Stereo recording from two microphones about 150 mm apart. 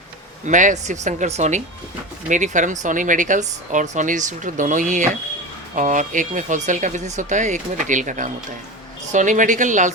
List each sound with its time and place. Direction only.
0.4 s a woman's voice: 55° right (ahead or behind)